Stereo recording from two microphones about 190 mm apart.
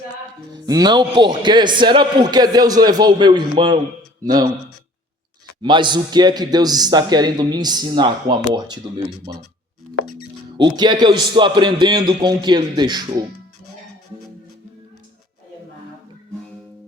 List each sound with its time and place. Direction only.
0.5 s a man's voice: 20° right (ahead or behind)
5.6 s a man's voice: 25° right (ahead or behind)
10.6 s a man's voice: 20° right (ahead or behind)